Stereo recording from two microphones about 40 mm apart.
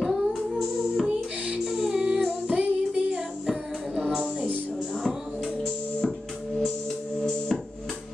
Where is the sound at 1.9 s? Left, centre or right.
Centre.